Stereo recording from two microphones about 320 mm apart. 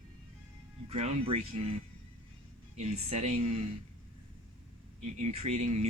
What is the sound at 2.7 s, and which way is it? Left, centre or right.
Speech, centre.